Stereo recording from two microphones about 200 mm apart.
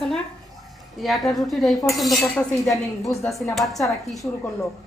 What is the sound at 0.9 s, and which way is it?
Speech, centre (ahead or behind).